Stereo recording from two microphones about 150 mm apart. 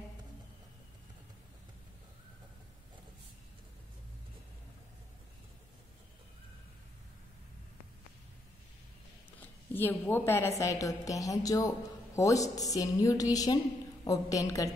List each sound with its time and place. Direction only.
9.4 s a woman's voice: 15° left (ahead or behind)